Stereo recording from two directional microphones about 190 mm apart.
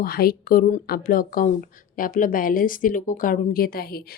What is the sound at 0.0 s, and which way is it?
Speech, 50° left (ahead or behind).